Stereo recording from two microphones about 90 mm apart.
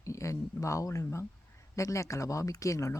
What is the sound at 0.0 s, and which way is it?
Speech, 35° left (ahead or behind).